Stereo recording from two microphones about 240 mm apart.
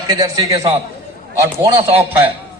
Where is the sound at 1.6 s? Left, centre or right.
Centre.